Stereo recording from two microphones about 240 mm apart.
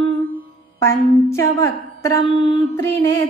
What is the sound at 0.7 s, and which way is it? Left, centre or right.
Music, centre.